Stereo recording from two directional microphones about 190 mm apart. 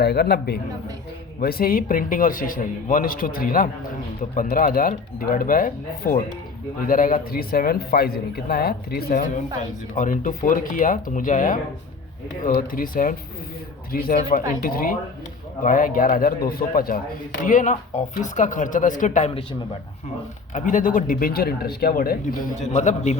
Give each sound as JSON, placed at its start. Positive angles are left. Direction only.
{"t": 0.0, "sound": "speech", "side_deg": 55}
{"t": 20.5, "sound": "speech", "side_deg": 40}